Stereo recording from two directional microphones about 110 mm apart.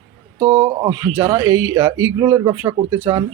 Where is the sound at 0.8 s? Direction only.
30° right (ahead or behind).